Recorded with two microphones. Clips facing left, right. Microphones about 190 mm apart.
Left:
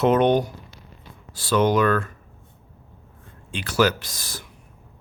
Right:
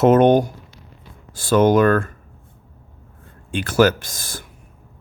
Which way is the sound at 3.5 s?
50° right (ahead or behind).